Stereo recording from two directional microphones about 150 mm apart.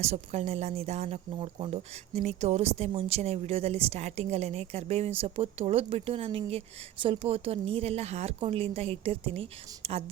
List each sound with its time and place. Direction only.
0.0 s speech: 45° right (ahead or behind)